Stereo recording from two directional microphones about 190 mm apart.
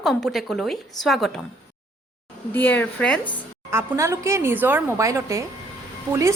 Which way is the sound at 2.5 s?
10° left (ahead or behind).